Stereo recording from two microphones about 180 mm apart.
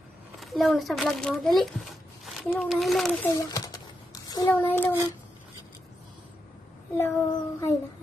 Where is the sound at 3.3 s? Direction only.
20° left (ahead or behind).